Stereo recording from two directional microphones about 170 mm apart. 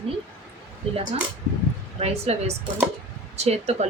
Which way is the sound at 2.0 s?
35° right (ahead or behind).